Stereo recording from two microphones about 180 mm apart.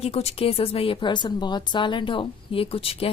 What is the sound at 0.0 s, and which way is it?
Speech, 35° left (ahead or behind).